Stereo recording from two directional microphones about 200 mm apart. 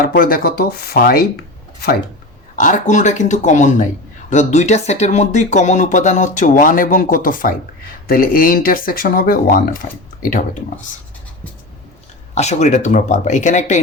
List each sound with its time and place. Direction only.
0.0 s speech: 45° left (ahead or behind)
2.6 s speech: 40° left (ahead or behind)
12.3 s speech: 35° left (ahead or behind)